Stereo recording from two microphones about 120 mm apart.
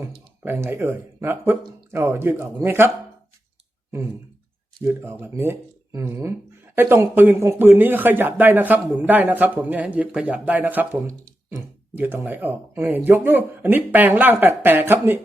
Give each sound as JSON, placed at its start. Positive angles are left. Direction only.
{"t": 0.0, "sound": "speech", "side_deg": -20}
{"t": 4.8, "sound": "speech", "side_deg": -20}
{"t": 11.9, "sound": "speech", "side_deg": -15}